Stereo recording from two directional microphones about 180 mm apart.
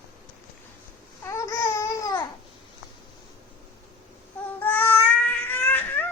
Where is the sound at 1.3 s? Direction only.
15° left (ahead or behind).